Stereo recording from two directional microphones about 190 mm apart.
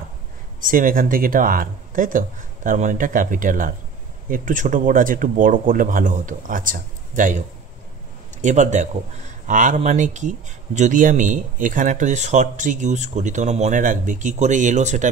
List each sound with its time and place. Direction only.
0.7 s speech: 45° right (ahead or behind)